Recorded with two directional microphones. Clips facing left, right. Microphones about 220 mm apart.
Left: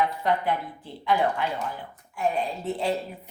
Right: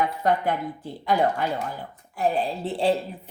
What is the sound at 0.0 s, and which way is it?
Speech, 45° right (ahead or behind).